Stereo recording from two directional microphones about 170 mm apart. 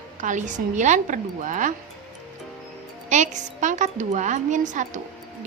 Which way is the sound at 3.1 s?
45° right (ahead or behind).